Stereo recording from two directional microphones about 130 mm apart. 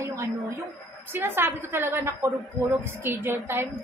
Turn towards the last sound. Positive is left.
turn(degrees=-20)  # may be behind; listen again after turning